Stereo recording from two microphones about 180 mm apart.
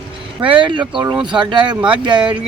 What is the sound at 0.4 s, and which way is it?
Speech, 25° right (ahead or behind).